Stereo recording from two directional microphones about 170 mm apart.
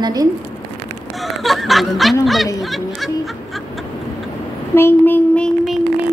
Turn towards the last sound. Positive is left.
turn(degrees=0)  # may be behind; listen again after turning